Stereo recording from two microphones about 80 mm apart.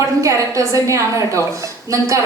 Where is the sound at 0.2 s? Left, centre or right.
Right.